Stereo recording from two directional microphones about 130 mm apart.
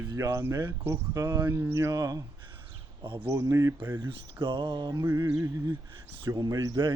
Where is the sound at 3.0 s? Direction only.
40° right (ahead or behind).